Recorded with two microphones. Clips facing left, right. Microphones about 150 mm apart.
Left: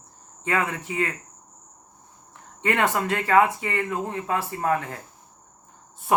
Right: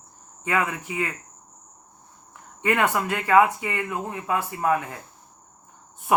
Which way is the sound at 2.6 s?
30° left (ahead or behind).